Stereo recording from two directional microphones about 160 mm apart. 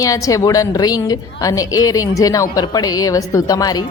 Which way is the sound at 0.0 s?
20° left (ahead or behind).